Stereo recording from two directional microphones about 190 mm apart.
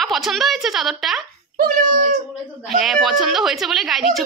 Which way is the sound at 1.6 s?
45° right (ahead or behind).